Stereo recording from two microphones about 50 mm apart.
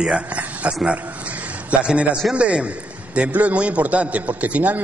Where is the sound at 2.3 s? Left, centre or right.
Right.